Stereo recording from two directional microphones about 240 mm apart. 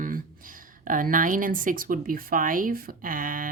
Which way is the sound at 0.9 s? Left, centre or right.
Right.